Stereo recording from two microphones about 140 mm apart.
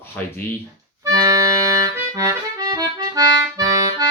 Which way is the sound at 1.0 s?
25° right (ahead or behind).